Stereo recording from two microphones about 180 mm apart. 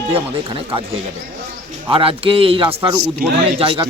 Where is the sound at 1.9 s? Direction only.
30° right (ahead or behind).